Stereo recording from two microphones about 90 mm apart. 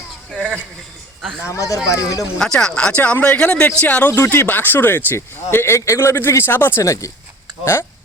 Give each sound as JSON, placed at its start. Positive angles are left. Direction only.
{"t": 0.3, "sound": "speech", "side_deg": 10}
{"t": 1.5, "sound": "speech", "side_deg": 35}
{"t": 2.4, "sound": "speech", "side_deg": 10}
{"t": 6.8, "sound": "speech", "side_deg": 35}